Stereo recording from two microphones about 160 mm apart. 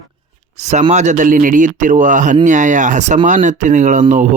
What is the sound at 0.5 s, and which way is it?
Speech, 45° right (ahead or behind).